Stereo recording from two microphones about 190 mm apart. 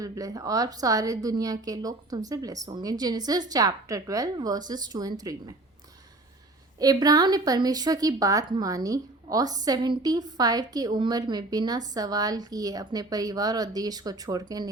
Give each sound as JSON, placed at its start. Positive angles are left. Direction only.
{"t": 0.0, "sound": "a woman's voice", "side_deg": -20}
{"t": 6.7, "sound": "a woman's voice", "side_deg": -20}